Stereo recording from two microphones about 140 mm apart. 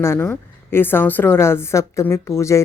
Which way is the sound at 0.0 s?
15° left (ahead or behind).